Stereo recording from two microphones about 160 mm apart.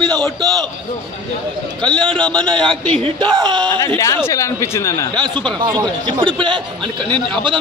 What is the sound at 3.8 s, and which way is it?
Speech, 20° left (ahead or behind).